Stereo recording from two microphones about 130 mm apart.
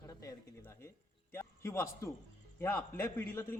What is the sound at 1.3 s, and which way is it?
A man's voice, 20° left (ahead or behind).